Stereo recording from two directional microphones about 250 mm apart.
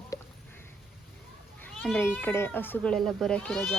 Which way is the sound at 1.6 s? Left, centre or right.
Centre.